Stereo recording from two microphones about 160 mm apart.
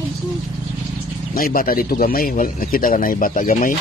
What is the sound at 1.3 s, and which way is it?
Speech, 65° left (ahead or behind).